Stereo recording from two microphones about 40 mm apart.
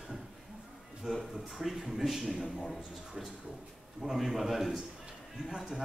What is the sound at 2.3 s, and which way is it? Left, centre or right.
Speech, centre.